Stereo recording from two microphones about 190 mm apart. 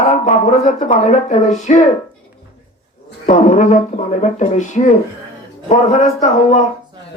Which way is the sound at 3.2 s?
40° left (ahead or behind).